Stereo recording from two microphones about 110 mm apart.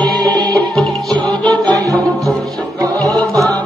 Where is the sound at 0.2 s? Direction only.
35° right (ahead or behind).